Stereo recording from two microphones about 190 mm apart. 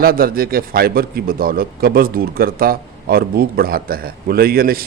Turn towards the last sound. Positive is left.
turn(degrees=-50)  # may be behind; listen again after turning